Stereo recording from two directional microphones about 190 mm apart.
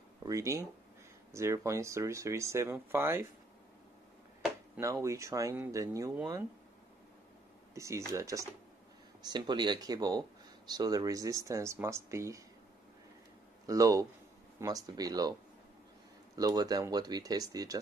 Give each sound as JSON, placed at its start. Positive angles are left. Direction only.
{"t": 0.2, "sound": "speech", "side_deg": -15}
{"t": 4.7, "sound": "speech", "side_deg": -15}
{"t": 7.7, "sound": "speech", "side_deg": -15}
{"t": 13.7, "sound": "speech", "side_deg": -15}
{"t": 16.3, "sound": "speech", "side_deg": -20}